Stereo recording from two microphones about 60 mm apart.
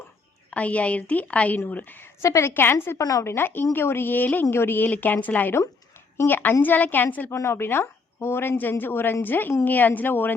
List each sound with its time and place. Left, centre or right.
0.5 s a woman's voice: left
1.5 s speech: left
2.2 s a woman's voice: left
2.5 s speech: left
3.0 s speech: left
3.2 s a woman's voice: left
7.3 s speech: left